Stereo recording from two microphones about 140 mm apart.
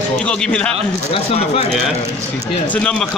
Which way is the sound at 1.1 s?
45° left (ahead or behind).